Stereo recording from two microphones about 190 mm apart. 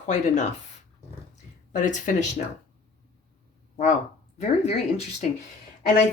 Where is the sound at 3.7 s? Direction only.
40° left (ahead or behind).